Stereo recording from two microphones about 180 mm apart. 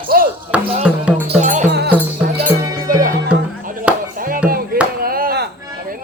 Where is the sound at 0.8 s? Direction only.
5° right (ahead or behind).